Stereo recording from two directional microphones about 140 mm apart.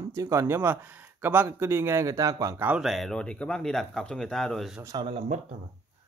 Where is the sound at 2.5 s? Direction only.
10° right (ahead or behind).